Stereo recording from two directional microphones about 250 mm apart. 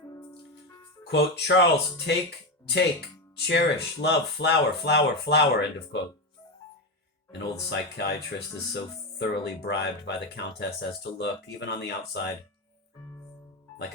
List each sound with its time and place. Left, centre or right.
0.0 s music: centre
1.0 s speech: left
3.3 s speech: left
7.3 s speech: left